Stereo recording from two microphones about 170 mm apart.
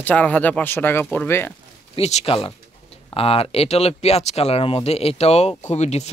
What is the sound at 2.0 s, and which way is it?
Speech, 40° left (ahead or behind).